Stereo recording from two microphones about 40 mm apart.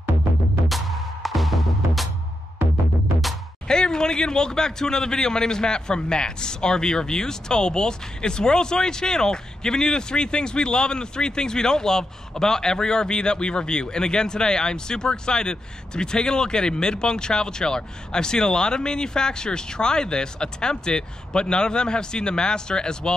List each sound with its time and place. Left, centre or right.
0.7 s music: centre
3.6 s speech: centre